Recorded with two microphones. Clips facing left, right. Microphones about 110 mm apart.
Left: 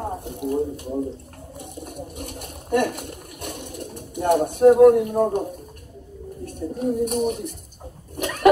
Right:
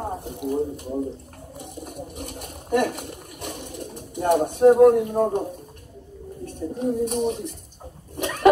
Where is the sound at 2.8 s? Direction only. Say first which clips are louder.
Even; 20° right (ahead or behind).